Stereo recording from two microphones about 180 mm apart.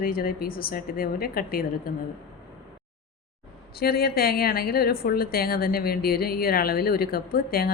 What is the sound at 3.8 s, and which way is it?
A woman's voice, 60° left (ahead or behind).